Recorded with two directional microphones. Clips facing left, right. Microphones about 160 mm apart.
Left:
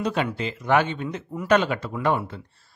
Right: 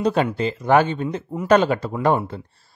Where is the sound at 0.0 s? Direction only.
35° right (ahead or behind).